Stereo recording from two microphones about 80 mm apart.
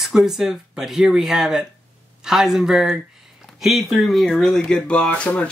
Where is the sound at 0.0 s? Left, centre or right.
Centre.